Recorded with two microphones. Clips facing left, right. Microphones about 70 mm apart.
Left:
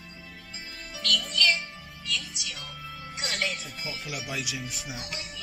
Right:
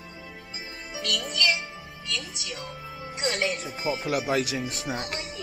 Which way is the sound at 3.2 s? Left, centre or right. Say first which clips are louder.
Right 5 dB; centre.